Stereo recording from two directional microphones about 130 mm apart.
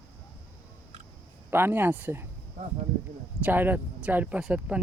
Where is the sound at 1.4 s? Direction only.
15° right (ahead or behind).